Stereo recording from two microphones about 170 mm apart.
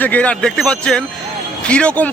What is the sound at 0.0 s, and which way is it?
A man's voice, 10° left (ahead or behind).